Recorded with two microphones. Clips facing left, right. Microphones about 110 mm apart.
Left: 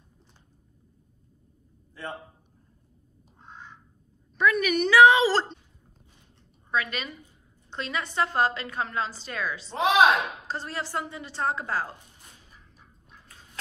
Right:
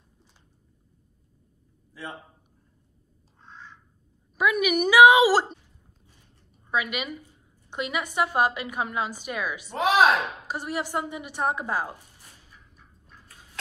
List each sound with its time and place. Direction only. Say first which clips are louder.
3.3 s duck: left 1 dB; 15° left (ahead or behind)
4.4 s a woman's voice: even; 10° right (ahead or behind)
6.7 s a woman's voice: right 1 dB; 10° right (ahead or behind)